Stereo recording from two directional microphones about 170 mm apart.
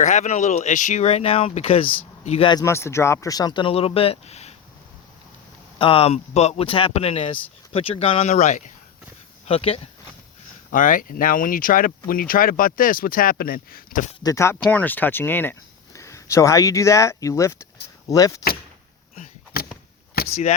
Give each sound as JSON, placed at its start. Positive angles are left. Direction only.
{"t": 0.0, "sound": "speech", "side_deg": 45}
{"t": 2.5, "sound": "speech", "side_deg": 20}
{"t": 5.8, "sound": "speech", "side_deg": 35}
{"t": 10.7, "sound": "speech", "side_deg": 50}
{"t": 14.3, "sound": "speech", "side_deg": 15}
{"t": 19.1, "sound": "a sound", "side_deg": 50}
{"t": 20.2, "sound": "a sound", "side_deg": 65}